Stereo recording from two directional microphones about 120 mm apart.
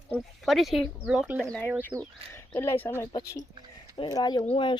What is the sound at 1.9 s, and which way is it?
Speech, 35° right (ahead or behind).